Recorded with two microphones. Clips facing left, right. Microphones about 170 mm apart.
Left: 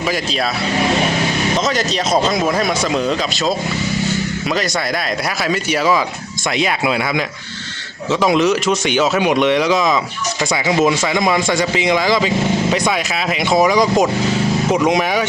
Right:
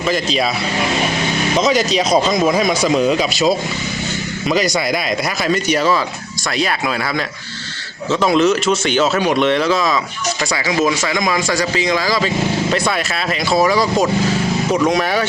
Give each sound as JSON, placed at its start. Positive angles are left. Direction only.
{"t": 1.5, "sound": "speech", "side_deg": 0}
{"t": 3.0, "sound": "speech", "side_deg": -10}
{"t": 5.4, "sound": "speech", "side_deg": 5}
{"t": 8.4, "sound": "a man's voice", "side_deg": 15}
{"t": 13.5, "sound": "a man's voice", "side_deg": 20}